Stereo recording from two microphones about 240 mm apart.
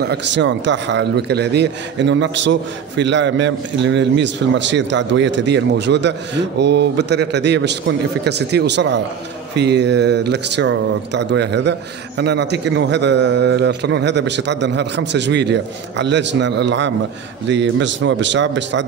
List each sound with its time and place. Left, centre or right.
0.0 s a man's voice: right